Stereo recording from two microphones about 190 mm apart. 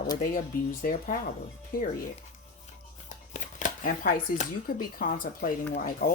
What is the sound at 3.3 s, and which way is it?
Shuffling cards, 40° left (ahead or behind).